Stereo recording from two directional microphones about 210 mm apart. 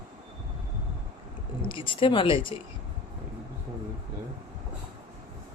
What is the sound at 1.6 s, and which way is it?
Speech, 25° left (ahead or behind).